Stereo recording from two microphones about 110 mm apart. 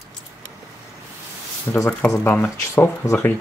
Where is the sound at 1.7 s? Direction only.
30° left (ahead or behind).